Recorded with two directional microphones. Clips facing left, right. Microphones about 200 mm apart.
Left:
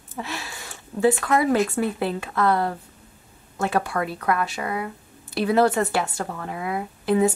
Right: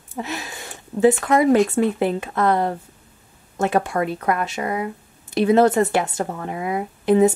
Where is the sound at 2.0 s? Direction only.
20° right (ahead or behind).